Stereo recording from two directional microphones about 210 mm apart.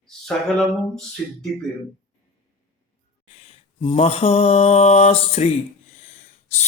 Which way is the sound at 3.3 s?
25° left (ahead or behind).